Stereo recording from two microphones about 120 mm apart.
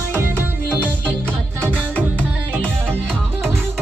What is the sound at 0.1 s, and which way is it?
Music, 15° right (ahead or behind).